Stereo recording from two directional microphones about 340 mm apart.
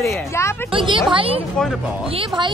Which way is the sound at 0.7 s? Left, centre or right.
Centre.